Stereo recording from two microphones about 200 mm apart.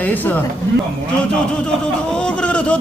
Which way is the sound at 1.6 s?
5° left (ahead or behind).